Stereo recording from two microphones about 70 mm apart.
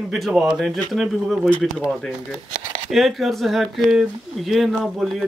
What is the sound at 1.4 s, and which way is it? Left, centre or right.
Speech, centre.